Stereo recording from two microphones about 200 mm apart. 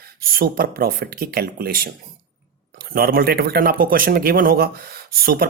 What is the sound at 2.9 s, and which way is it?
Speech, 50° right (ahead or behind).